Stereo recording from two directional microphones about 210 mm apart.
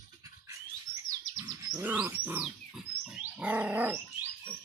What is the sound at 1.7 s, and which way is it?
Wild animals, 5° right (ahead or behind).